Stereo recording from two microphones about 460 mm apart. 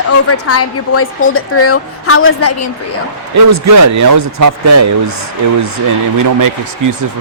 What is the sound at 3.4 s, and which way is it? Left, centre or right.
Speech, right.